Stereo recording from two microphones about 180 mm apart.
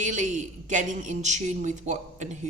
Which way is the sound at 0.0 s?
45° right (ahead or behind).